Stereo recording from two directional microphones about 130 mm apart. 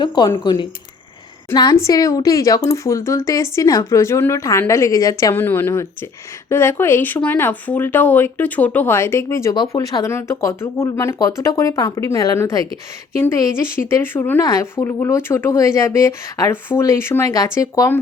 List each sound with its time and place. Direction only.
0.0 s speech: 35° left (ahead or behind)